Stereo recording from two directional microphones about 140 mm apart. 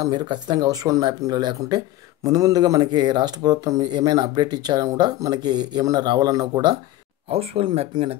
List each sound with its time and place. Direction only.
0.0 s speech: 30° right (ahead or behind)
7.2 s speech: 45° right (ahead or behind)